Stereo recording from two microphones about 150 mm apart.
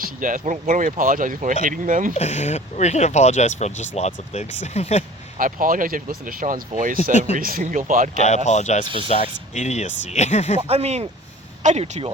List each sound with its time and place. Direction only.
0.0 s speech: 60° right (ahead or behind)
2.1 s speech: 50° left (ahead or behind)
5.4 s speech: 65° right (ahead or behind)
7.1 s speech: 50° left (ahead or behind)
7.3 s speech: 65° right (ahead or behind)
8.4 s speech: 50° left (ahead or behind)
10.7 s speech: 45° right (ahead or behind)